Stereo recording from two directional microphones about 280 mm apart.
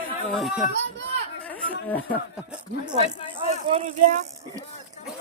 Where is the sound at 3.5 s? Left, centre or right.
Right.